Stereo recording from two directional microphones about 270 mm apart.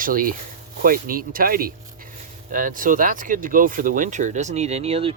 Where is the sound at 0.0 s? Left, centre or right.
Right.